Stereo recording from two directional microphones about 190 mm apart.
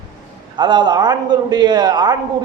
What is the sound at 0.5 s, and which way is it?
A man's voice, 25° right (ahead or behind).